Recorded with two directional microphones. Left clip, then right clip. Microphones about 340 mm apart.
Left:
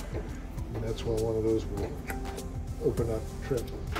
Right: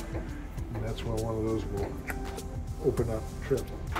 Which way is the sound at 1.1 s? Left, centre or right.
Centre.